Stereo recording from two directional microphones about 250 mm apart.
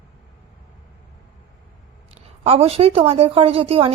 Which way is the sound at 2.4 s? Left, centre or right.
Right.